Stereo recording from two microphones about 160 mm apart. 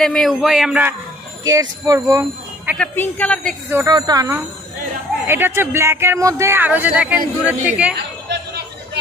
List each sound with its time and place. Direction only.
0.0 s speech: 5° left (ahead or behind)
1.4 s speech: 20° right (ahead or behind)
2.8 s speech: 10° left (ahead or behind)
3.7 s speech: 20° right (ahead or behind)
7.9 s chatter: 90° right